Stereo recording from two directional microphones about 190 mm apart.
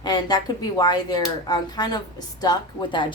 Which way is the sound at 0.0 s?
20° left (ahead or behind).